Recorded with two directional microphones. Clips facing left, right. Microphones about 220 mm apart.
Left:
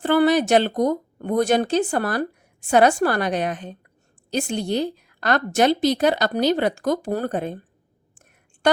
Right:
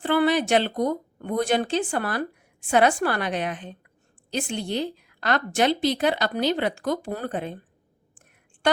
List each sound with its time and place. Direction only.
0.0 s speech: 40° left (ahead or behind)